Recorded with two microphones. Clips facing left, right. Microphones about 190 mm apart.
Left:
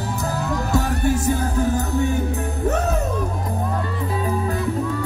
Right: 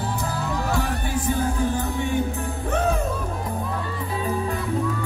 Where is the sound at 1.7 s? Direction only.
40° left (ahead or behind).